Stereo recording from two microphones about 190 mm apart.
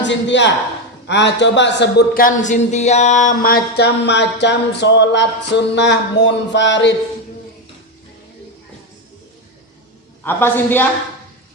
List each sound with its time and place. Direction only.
0.0 s a man's voice: 70° left (ahead or behind)
10.2 s a woman's voice: 10° left (ahead or behind)